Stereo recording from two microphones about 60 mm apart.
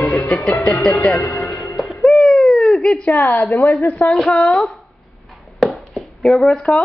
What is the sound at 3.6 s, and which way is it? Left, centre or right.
Speech, left.